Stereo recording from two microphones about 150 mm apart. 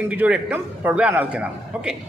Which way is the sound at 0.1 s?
10° right (ahead or behind).